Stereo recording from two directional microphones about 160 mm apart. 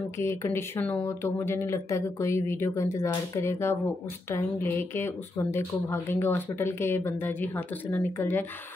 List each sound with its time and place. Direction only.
0.2 s a woman's voice: 15° left (ahead or behind)